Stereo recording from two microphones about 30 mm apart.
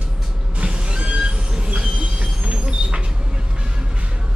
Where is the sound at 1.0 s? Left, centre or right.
Right.